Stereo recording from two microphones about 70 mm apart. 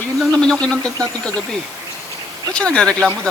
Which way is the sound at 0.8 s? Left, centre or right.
Right.